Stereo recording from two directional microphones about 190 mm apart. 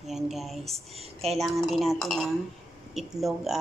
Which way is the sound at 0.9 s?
30° right (ahead or behind).